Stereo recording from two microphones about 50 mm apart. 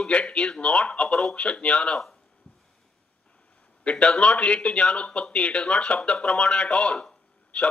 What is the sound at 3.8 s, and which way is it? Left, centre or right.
A man's voice, left.